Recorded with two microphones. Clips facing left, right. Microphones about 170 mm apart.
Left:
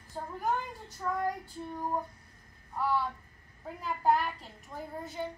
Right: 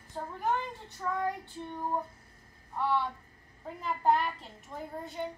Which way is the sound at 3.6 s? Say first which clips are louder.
Even; centre (ahead or behind).